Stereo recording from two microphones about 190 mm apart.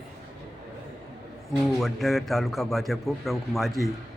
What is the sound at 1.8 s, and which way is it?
A man's voice, centre (ahead or behind).